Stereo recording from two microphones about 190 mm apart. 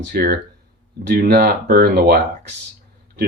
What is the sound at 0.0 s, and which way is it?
Speech, 55° right (ahead or behind).